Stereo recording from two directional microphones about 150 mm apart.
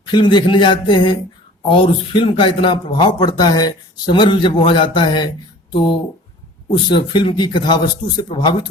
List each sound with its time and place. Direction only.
0.0 s speech: 30° left (ahead or behind)